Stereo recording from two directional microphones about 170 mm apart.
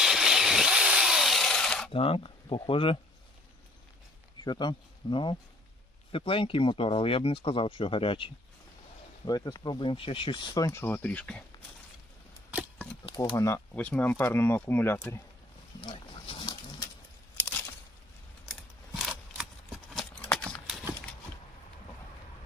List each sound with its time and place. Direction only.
0.0 s chainsaw: centre (ahead or behind)
1.9 s speech: 30° left (ahead or behind)
4.4 s speech: 25° left (ahead or behind); by 11.4 s 5° left (ahead or behind)
13.3 s speech: 15° left (ahead or behind)
15.8 s dog: 30° left (ahead or behind)
17.4 s a sound: 15° left (ahead or behind)
19.0 s a sound: centre (ahead or behind)